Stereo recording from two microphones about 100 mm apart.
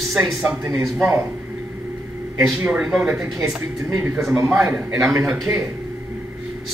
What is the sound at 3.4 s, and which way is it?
A man's voice, 25° right (ahead or behind).